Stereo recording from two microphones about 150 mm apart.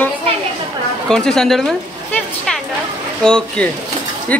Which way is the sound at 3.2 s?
5° left (ahead or behind).